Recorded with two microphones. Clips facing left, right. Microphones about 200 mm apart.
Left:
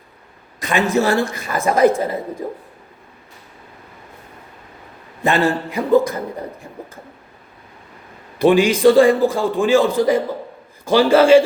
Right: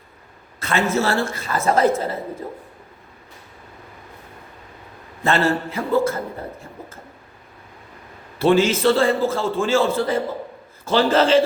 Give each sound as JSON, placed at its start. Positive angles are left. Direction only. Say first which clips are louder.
{"t": 0.6, "sound": "a woman's voice", "louder": "left 3 dB", "side_deg": 15}
{"t": 5.2, "sound": "a woman's voice", "louder": "left 2 dB", "side_deg": 15}
{"t": 8.4, "sound": "a woman's voice", "louder": "left 3 dB", "side_deg": 15}